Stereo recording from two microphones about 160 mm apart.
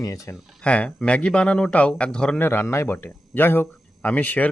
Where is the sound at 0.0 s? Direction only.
20° left (ahead or behind).